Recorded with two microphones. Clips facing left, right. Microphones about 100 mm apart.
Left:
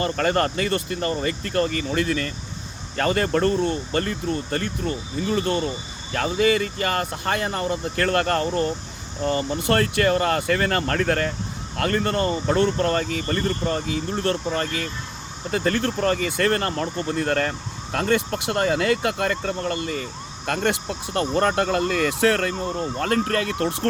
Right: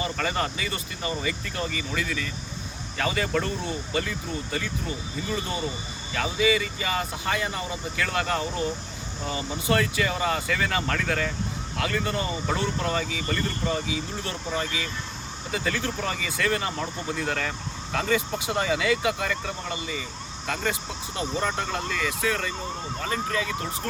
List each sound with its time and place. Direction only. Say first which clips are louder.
0.0 s speech: left 6 dB; 55° left (ahead or behind)
6.1 s speech: left 4 dB; 50° left (ahead or behind); by 23.9 s 70° left (ahead or behind)